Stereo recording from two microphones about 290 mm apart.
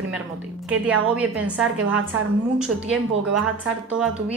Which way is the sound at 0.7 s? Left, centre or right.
Centre.